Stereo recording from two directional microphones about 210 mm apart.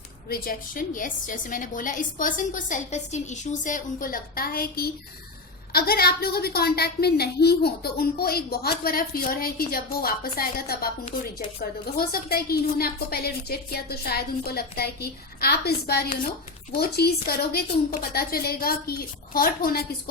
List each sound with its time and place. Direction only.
0.3 s a woman's voice: 45° left (ahead or behind)
11.9 s a woman's voice: 45° left (ahead or behind)